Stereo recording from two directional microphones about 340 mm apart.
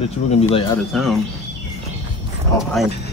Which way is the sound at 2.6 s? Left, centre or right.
Centre.